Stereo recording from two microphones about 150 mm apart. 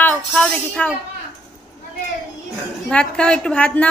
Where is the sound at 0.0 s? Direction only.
10° left (ahead or behind).